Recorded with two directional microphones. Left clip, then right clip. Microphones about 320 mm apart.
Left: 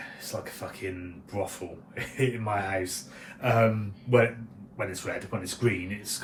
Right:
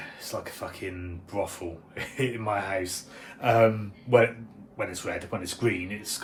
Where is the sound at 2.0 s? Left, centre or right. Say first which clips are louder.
Left 1 dB; centre.